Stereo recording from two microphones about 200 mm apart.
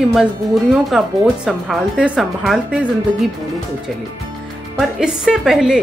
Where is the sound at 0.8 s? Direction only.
Centre (ahead or behind).